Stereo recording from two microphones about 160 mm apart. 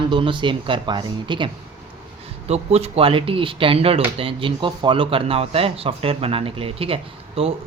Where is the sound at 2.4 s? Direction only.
40° right (ahead or behind).